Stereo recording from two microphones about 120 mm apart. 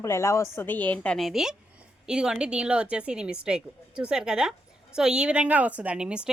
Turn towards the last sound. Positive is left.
turn(degrees=-10)  # may be behind; listen again after turning